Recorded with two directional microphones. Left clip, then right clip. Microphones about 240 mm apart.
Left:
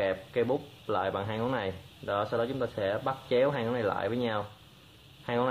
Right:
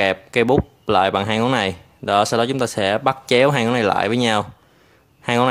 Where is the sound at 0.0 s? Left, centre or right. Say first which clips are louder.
Right 11 dB; right.